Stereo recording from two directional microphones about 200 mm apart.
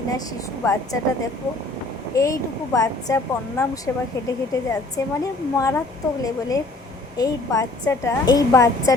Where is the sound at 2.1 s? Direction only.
15° left (ahead or behind).